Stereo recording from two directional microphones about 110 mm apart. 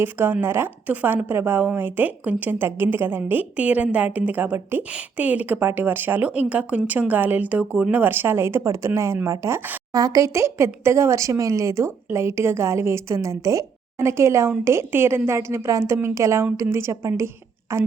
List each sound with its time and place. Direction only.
0.0 s a woman's voice: 20° right (ahead or behind)